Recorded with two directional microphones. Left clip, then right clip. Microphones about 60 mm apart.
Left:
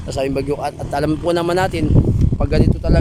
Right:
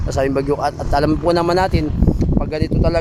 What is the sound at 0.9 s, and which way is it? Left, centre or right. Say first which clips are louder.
Speech: right 2 dB; right.